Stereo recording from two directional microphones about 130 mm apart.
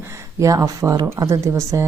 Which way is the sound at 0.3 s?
25° right (ahead or behind).